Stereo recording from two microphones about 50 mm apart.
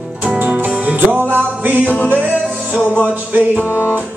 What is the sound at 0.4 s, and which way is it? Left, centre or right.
Music, right.